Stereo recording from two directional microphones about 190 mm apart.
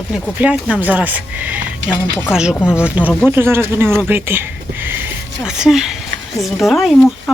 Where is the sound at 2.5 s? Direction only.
10° left (ahead or behind).